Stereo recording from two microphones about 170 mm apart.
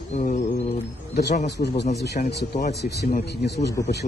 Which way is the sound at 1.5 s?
80° left.